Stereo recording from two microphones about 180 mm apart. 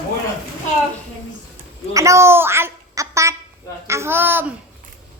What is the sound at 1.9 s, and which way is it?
A child's voice, 15° right (ahead or behind).